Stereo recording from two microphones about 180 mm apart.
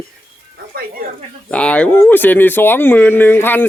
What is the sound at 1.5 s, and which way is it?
Speech, 5° left (ahead or behind).